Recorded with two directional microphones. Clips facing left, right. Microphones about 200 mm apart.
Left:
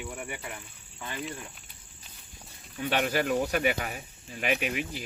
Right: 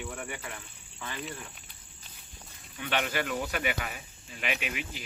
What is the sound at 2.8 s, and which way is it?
Speech, 40° left (ahead or behind).